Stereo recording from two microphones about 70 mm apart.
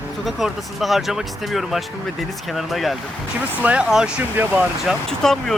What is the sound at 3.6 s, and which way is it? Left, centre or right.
Speech, right.